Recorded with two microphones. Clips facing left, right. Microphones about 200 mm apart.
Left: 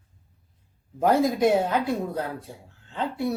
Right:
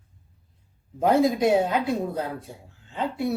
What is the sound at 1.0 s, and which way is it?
Speech, 20° right (ahead or behind).